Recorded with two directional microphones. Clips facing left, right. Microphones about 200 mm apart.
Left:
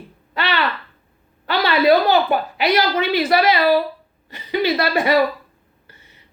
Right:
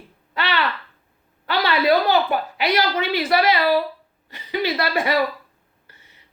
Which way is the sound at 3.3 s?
25° left (ahead or behind).